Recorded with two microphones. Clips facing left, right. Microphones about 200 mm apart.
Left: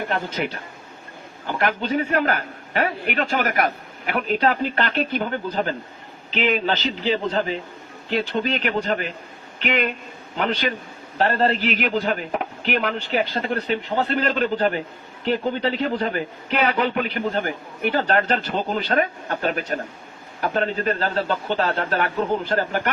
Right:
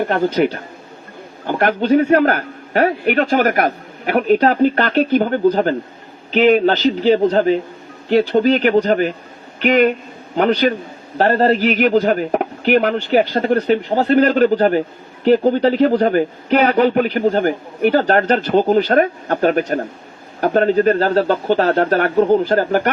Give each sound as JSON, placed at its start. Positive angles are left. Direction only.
{"t": 0.1, "sound": "a man's voice", "side_deg": -40}